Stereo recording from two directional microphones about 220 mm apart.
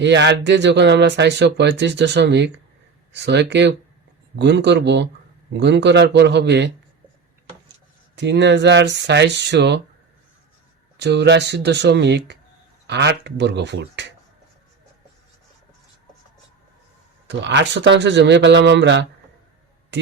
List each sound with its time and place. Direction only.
0.0 s speech: 55° right (ahead or behind)
8.1 s speech: 50° right (ahead or behind)
10.9 s speech: 50° right (ahead or behind)
17.2 s speech: 55° right (ahead or behind)